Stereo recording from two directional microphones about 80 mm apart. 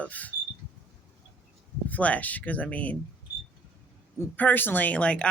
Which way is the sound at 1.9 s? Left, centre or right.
Centre.